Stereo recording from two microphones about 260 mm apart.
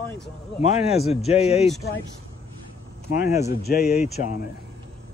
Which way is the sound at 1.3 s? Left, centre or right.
Left.